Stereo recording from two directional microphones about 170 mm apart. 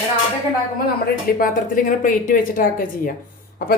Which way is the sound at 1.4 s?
50° left (ahead or behind).